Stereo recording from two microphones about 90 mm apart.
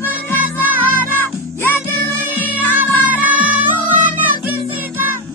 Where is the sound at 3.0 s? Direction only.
20° right (ahead or behind).